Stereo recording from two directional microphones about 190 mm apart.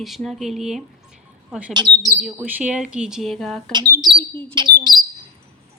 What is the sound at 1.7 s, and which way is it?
Speech, 25° right (ahead or behind).